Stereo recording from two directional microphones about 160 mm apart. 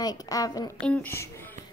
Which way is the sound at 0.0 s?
25° left (ahead or behind).